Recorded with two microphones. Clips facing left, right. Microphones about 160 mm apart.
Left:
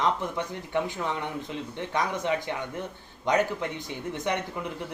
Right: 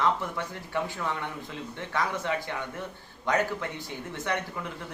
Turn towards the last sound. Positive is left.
turn(degrees=20)  # may be behind; listen again after turning